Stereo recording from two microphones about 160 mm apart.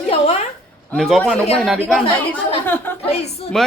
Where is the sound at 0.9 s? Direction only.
5° left (ahead or behind).